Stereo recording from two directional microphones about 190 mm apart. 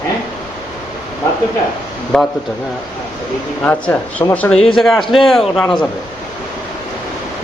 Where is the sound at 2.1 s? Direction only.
5° left (ahead or behind).